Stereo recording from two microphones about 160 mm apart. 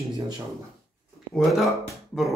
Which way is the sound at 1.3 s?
Centre (ahead or behind).